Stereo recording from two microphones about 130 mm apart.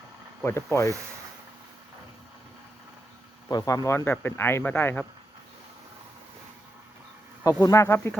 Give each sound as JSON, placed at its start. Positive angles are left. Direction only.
{"t": 0.4, "sound": "speech", "side_deg": 20}
{"t": 3.5, "sound": "speech", "side_deg": 30}
{"t": 7.4, "sound": "speech", "side_deg": 25}